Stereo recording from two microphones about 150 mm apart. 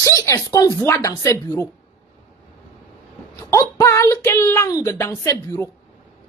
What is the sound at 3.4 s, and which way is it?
Speech, 20° left (ahead or behind).